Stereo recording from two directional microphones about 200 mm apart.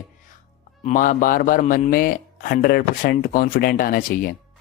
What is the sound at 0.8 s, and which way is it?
Speech, 40° left (ahead or behind).